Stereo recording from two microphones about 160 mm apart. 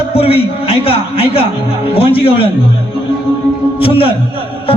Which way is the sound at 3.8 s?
35° left (ahead or behind).